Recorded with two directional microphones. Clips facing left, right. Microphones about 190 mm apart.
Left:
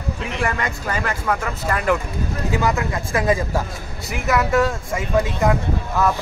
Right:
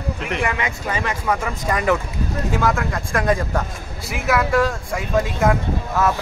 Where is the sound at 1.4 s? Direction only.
10° right (ahead or behind).